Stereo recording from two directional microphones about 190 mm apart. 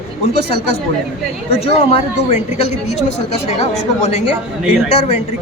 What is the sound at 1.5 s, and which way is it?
A woman's voice, 30° left (ahead or behind).